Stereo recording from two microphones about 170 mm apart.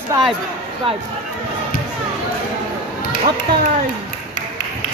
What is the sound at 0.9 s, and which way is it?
Speech, 35° right (ahead or behind).